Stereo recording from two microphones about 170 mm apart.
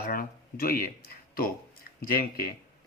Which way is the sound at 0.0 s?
60° left (ahead or behind).